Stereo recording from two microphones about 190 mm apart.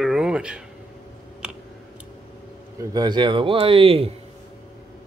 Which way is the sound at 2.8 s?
20° right (ahead or behind).